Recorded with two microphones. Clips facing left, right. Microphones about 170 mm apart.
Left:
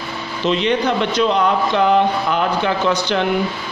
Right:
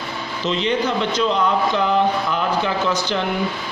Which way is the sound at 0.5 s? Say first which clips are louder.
Left 3 dB; 65° left (ahead or behind).